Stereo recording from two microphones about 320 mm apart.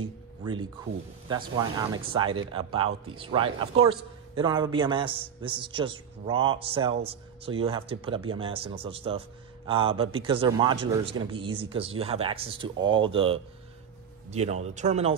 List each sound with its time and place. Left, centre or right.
0.0 s a man's voice: centre